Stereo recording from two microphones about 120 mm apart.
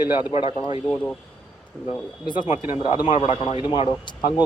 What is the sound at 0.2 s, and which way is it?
Speech, 45° left (ahead or behind).